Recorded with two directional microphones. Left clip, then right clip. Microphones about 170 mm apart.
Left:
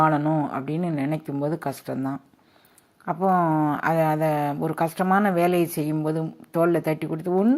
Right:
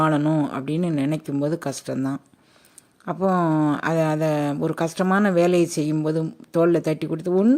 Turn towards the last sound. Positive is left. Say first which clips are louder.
# right 2 dB
turn(degrees=-30)  # may be behind; listen again after turning